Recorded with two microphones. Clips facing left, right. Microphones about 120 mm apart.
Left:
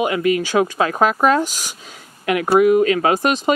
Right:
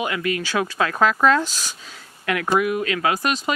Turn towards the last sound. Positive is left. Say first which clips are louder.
# left 5 dB
turn(degrees=30)  # may be behind; listen again after turning